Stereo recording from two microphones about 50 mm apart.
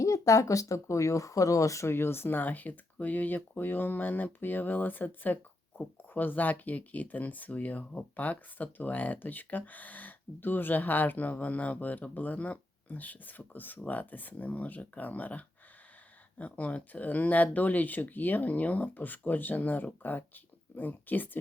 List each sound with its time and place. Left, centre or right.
0.0 s speech: left
1.9 s speech: left